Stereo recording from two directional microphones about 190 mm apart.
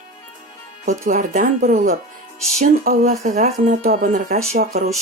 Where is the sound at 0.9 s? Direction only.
45° right (ahead or behind).